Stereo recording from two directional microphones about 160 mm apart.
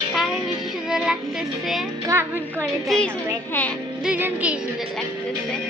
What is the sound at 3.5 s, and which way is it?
Music, 10° left (ahead or behind).